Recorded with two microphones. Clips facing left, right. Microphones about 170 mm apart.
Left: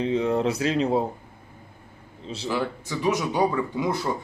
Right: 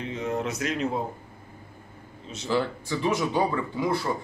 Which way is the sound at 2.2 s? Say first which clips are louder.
Left 4 dB; 30° left (ahead or behind).